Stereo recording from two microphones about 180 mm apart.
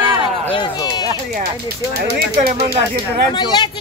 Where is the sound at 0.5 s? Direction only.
20° left (ahead or behind).